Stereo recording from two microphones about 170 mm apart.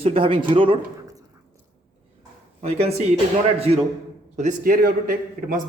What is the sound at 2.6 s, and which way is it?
Speech, 40° right (ahead or behind).